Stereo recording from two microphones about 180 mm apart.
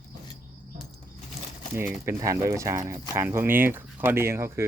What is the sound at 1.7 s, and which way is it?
Speech, 15° right (ahead or behind).